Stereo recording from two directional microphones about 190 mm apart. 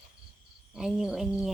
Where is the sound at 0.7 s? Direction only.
5° right (ahead or behind).